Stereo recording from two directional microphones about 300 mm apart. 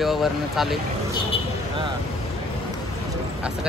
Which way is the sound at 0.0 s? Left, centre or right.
Centre.